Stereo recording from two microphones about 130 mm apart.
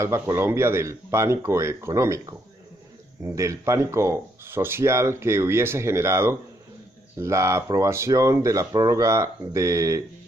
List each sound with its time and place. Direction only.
0.0 s speech: 20° right (ahead or behind)